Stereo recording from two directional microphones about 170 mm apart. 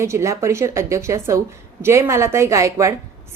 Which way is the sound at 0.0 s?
15° right (ahead or behind).